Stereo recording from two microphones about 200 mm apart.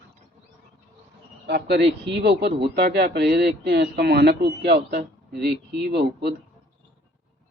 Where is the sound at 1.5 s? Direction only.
55° right (ahead or behind).